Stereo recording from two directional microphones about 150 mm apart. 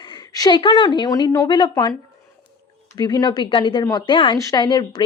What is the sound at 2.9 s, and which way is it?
Speech, 25° left (ahead or behind).